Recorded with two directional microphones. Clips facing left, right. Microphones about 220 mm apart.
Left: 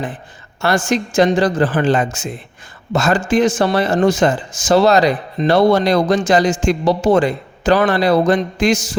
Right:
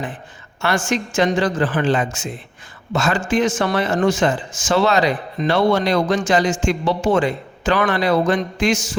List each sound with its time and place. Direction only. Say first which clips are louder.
0.6 s speech: left 4 dB; 35° left (ahead or behind)